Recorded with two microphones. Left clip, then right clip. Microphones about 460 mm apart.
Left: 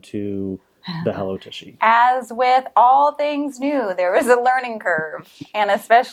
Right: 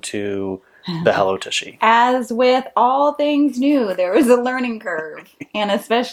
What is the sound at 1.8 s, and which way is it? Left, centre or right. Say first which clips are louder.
Speech: even; left.